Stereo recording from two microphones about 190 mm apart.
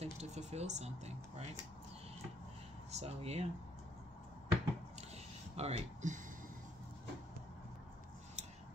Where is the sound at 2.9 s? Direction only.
35° right (ahead or behind).